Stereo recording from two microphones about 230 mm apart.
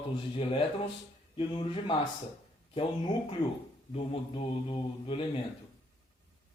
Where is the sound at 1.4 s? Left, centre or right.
Left.